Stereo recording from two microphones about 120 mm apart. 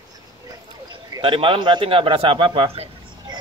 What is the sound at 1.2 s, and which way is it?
A man's voice, 45° right (ahead or behind).